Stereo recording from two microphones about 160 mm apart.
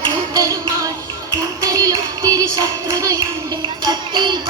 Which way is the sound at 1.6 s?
25° right (ahead or behind).